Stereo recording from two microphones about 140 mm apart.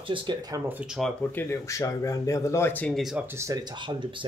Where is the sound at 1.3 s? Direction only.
15° left (ahead or behind).